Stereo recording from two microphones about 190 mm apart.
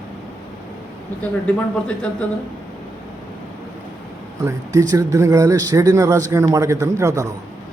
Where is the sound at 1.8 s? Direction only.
5° left (ahead or behind).